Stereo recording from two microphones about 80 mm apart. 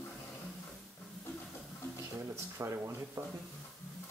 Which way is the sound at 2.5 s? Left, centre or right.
Right.